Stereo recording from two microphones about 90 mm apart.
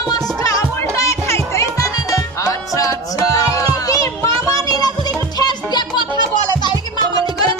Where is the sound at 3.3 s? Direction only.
40° left (ahead or behind).